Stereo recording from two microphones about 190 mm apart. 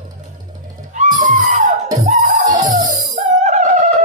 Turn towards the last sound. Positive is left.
turn(degrees=-40)  # may be behind; listen again after turning